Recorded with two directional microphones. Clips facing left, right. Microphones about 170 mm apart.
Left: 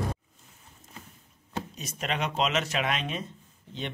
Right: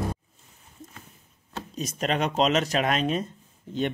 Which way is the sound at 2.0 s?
40° right (ahead or behind).